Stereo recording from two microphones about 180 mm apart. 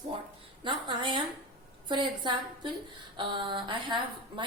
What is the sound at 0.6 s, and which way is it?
A woman's voice, 25° right (ahead or behind).